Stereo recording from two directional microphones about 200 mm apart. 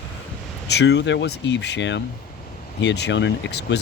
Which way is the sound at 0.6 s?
60° left (ahead or behind).